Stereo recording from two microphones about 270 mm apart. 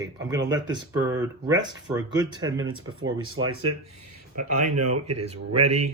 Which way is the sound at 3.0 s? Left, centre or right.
Right.